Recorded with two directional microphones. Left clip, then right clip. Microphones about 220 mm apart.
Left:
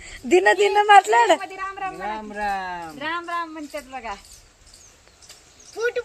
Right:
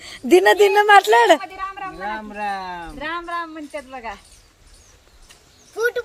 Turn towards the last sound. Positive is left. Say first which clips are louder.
# right 3 dB
turn(degrees=-30)  # may be behind; listen again after turning